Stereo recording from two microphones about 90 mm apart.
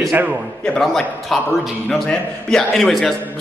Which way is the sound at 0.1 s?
20° right (ahead or behind).